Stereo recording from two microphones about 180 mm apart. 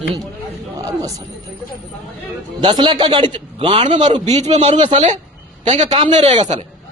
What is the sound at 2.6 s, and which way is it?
Speech, 25° right (ahead or behind).